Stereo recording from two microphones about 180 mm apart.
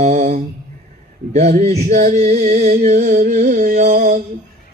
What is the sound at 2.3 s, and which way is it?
Music, 50° right (ahead or behind).